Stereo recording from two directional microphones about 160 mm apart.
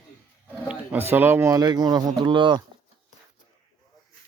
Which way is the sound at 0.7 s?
10° right (ahead or behind).